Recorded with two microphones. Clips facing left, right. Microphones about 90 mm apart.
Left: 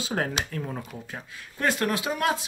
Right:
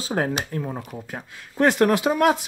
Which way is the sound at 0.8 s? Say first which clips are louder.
Right 4 dB; 55° right (ahead or behind).